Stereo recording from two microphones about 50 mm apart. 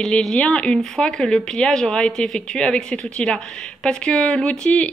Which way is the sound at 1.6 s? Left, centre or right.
Centre.